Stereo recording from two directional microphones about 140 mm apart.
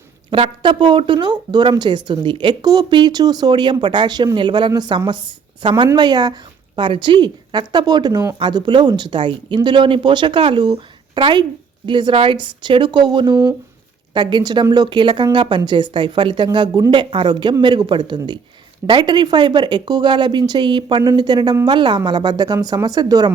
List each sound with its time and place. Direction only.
0.3 s a woman's voice: 40° right (ahead or behind)